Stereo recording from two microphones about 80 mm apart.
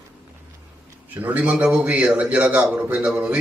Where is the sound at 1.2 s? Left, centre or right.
Centre.